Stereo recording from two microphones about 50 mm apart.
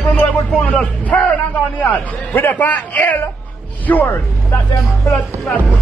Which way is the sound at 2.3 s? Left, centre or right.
Left.